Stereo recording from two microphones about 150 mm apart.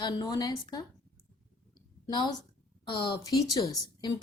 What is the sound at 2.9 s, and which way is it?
A woman's voice, 30° left (ahead or behind).